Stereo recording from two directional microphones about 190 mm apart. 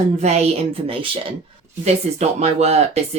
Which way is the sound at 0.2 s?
35° right (ahead or behind).